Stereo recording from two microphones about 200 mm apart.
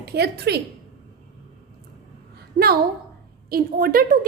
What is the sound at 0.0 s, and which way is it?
Speech, 55° right (ahead or behind).